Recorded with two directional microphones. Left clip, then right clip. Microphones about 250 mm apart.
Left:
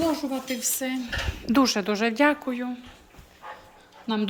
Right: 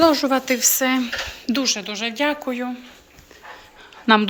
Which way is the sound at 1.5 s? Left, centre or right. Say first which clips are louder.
Left 1 dB; centre.